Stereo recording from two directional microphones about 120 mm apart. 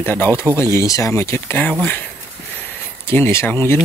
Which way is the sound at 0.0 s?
15° left (ahead or behind).